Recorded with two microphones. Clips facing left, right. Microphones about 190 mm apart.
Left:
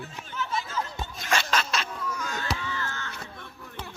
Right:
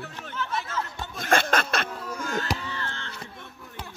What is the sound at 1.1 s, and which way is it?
Snicker, 55° right (ahead or behind).